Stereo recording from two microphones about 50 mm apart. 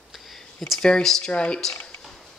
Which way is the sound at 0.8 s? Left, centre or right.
Centre.